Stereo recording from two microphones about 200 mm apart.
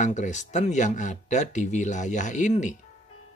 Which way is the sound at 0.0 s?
35° left (ahead or behind).